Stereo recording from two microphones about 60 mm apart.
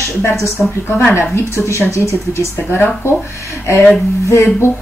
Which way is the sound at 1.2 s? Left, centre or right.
Left.